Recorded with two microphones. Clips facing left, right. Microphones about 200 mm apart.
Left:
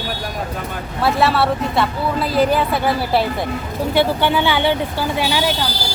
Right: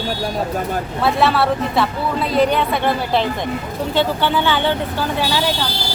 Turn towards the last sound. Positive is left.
turn(degrees=10)  # may be behind; listen again after turning